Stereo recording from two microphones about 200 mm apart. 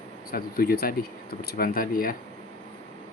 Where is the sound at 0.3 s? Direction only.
50° left (ahead or behind).